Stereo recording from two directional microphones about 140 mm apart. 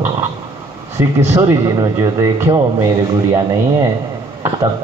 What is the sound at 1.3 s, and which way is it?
Mantra, 25° right (ahead or behind).